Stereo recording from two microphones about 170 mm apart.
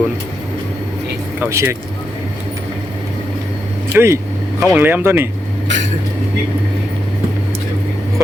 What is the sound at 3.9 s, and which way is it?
Speech, 15° right (ahead or behind).